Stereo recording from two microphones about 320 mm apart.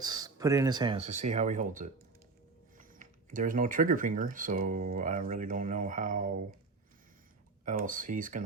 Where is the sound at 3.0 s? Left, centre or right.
Right.